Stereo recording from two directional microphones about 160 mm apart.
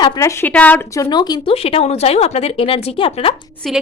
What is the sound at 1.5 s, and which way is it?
Speech, 35° left (ahead or behind).